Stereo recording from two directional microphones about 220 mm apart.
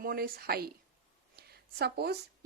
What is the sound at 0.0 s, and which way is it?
Speech, 40° right (ahead or behind).